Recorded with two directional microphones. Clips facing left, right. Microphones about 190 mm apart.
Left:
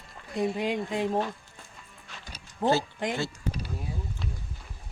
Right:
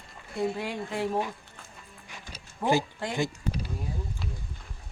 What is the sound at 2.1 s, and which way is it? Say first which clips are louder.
Music: right 1 dB; 15° right (ahead or behind).